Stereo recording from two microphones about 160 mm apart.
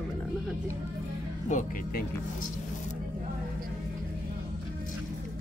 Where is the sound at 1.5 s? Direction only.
50° left (ahead or behind).